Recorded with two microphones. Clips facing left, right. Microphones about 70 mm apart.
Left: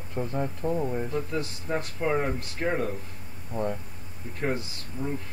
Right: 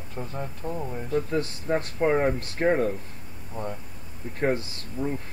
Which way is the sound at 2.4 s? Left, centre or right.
Right.